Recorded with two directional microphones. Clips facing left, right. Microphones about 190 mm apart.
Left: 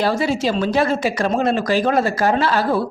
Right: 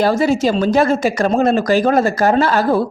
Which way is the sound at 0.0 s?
45° right (ahead or behind).